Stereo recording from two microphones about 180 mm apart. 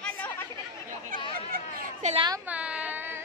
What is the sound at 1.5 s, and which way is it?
Chatter, 40° right (ahead or behind).